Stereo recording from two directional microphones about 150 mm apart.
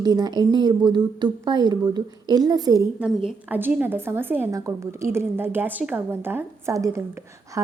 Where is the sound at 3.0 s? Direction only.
5° right (ahead or behind).